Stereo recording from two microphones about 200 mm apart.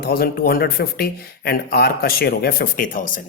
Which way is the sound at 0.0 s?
50° left (ahead or behind).